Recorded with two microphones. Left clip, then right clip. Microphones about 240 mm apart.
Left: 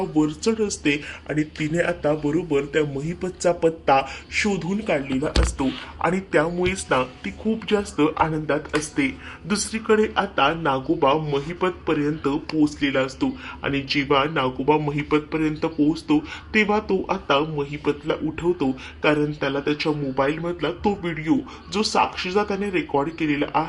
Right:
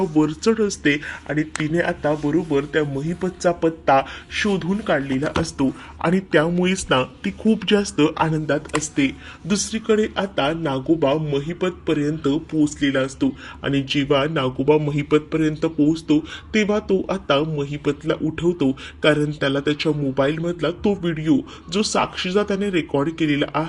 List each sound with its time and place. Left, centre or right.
0.2 s speech: right
5.5 s speech: right